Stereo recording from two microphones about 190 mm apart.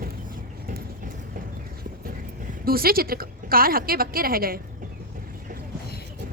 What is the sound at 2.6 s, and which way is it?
A woman's voice, 50° right (ahead or behind).